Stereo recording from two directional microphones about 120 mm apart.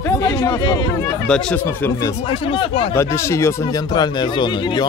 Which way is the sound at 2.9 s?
25° left (ahead or behind).